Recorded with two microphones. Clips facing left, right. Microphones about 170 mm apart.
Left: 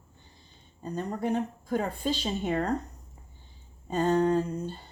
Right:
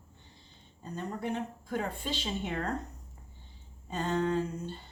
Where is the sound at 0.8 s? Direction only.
40° left (ahead or behind).